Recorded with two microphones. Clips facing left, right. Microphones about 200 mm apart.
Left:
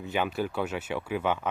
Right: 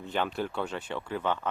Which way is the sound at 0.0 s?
5° left (ahead or behind).